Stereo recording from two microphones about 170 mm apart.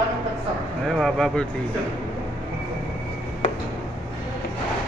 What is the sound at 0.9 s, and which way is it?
Speech, 5° left (ahead or behind).